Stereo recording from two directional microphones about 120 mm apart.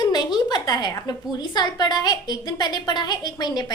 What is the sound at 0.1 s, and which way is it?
A woman's voice, 35° left (ahead or behind).